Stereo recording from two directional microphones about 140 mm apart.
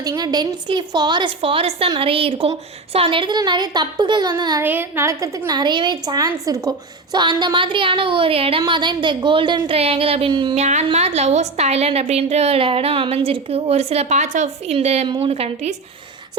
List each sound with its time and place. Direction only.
0.0 s a woman's voice: 30° right (ahead or behind)
4.6 s a woman's voice: 15° right (ahead or behind)
5.5 s a woman's voice: 30° right (ahead or behind)
10.5 s a woman's voice: 50° right (ahead or behind)